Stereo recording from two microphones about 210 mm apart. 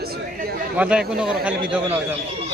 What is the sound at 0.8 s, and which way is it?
A man's voice, 5° right (ahead or behind).